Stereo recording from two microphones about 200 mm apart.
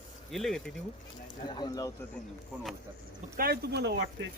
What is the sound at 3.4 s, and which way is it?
Speech, 50° right (ahead or behind).